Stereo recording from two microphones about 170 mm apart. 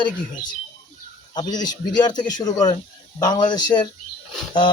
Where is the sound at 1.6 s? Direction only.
25° left (ahead or behind).